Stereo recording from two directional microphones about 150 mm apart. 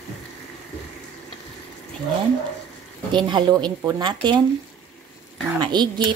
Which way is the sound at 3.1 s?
30° right (ahead or behind).